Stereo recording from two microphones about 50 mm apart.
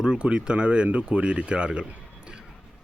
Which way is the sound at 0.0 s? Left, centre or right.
Centre.